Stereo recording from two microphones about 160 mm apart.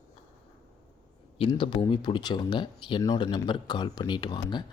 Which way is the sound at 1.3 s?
30° left (ahead or behind).